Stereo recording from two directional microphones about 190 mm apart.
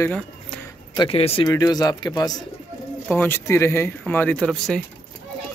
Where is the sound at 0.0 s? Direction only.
5° left (ahead or behind).